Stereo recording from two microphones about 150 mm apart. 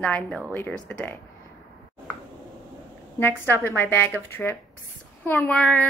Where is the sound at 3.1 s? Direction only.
15° left (ahead or behind).